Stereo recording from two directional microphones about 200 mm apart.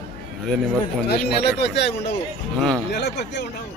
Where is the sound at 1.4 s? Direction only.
55° left (ahead or behind).